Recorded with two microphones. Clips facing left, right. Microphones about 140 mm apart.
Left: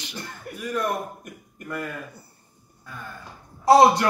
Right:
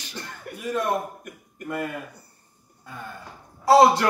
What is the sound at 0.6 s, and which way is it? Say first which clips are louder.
Speech: right 1 dB; 25° right (ahead or behind).